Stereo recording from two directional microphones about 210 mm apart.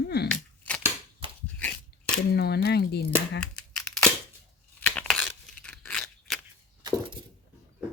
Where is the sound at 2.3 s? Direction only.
50° left (ahead or behind).